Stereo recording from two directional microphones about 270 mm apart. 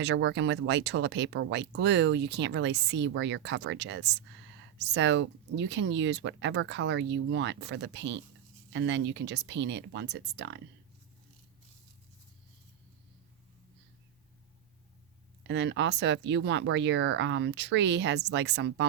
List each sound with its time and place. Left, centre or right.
0.0 s speech: right
15.4 s speech: right